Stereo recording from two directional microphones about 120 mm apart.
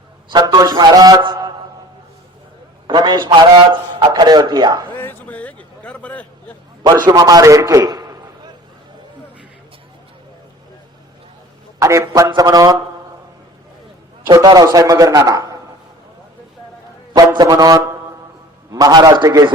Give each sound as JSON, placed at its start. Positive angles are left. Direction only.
{"t": 0.3, "sound": "a man's voice", "side_deg": -35}
{"t": 1.2, "sound": "a sound", "side_deg": -35}
{"t": 2.8, "sound": "a man's voice", "side_deg": -40}
{"t": 4.9, "sound": "a sound", "side_deg": 15}
{"t": 7.0, "sound": "a man's voice", "side_deg": -30}
{"t": 11.8, "sound": "a man's voice", "side_deg": -25}
{"t": 14.4, "sound": "a man's voice", "side_deg": -30}
{"t": 17.2, "sound": "a man's voice", "side_deg": -30}